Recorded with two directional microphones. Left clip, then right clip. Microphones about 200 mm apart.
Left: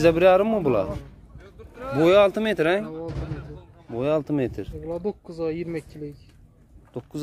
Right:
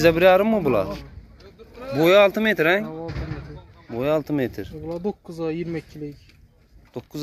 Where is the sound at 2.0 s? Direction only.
5° left (ahead or behind).